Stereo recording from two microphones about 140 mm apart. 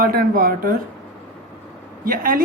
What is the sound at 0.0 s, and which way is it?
Speech, 90° right.